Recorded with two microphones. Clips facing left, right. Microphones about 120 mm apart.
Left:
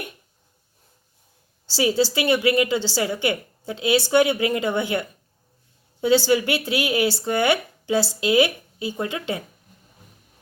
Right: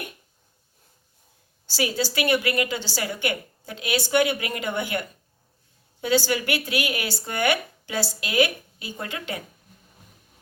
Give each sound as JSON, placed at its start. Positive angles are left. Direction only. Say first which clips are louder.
{"t": 1.7, "sound": "a woman's voice", "louder": "left 5 dB", "side_deg": 25}